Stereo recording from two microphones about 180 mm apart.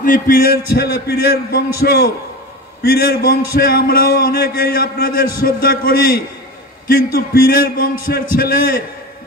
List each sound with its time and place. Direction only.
0.0 s a man's voice: 50° left (ahead or behind)